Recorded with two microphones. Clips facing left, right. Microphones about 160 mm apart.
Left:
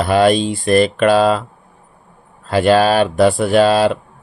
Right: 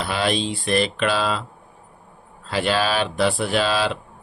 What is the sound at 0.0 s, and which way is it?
Speech, 50° left (ahead or behind).